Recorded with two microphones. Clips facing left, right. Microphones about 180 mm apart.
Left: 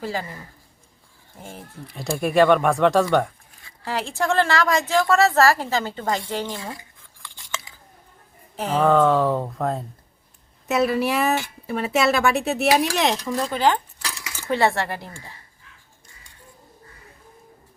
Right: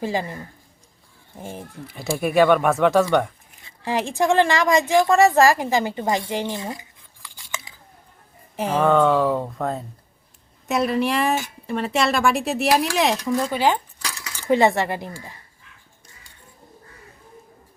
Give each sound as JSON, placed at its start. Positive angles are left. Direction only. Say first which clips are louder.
{"t": 0.0, "sound": "speech", "louder": "right 4 dB", "side_deg": -20}
{"t": 1.4, "sound": "speech", "louder": "right 5 dB", "side_deg": -20}
{"t": 1.9, "sound": "speech", "louder": "right 1 dB", "side_deg": -5}
{"t": 3.6, "sound": "speech", "louder": "right 3 dB", "side_deg": -20}
{"t": 8.5, "sound": "speech", "louder": "right 1 dB", "side_deg": -10}
{"t": 8.8, "sound": "speech", "louder": "even", "side_deg": 0}
{"t": 9.4, "sound": "speech", "louder": "left 1 dB", "side_deg": 0}